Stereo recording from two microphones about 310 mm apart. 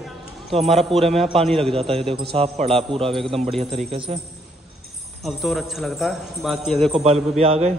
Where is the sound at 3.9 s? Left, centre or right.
Centre.